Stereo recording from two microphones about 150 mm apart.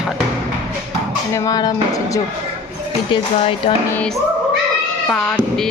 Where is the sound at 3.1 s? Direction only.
35° left (ahead or behind).